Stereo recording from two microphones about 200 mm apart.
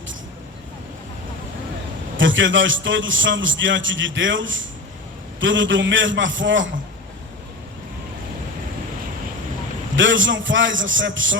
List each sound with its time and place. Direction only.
2.1 s a man's voice: 70° right (ahead or behind)
9.9 s a man's voice: 70° right (ahead or behind)